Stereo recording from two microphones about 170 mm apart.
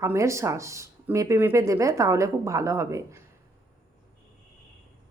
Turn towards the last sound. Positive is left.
turn(degrees=-20)  # may be behind; listen again after turning